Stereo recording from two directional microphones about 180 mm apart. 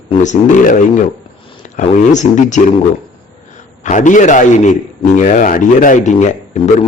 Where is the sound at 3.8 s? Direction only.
45° left (ahead or behind).